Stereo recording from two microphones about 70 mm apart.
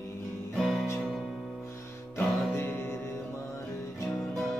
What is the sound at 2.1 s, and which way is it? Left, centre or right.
Music, left.